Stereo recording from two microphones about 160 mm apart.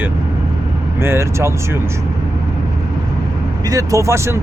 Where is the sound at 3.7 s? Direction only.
20° right (ahead or behind).